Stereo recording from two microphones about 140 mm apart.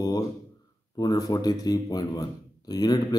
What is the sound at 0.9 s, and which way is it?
Speech, 25° left (ahead or behind).